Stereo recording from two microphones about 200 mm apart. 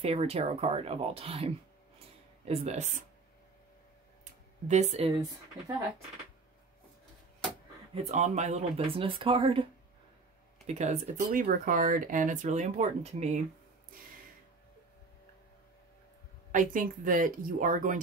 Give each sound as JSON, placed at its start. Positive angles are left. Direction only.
{"t": 0.0, "sound": "speech", "side_deg": -30}
{"t": 4.6, "sound": "speech", "side_deg": -35}
{"t": 7.9, "sound": "speech", "side_deg": -35}
{"t": 10.7, "sound": "speech", "side_deg": -35}
{"t": 16.5, "sound": "speech", "side_deg": -40}